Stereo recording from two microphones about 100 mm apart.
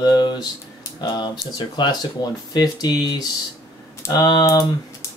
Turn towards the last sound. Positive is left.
turn(degrees=35)  # may be behind; listen again after turning